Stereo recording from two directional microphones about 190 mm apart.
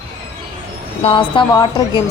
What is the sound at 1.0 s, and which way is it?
Speech, 25° left (ahead or behind).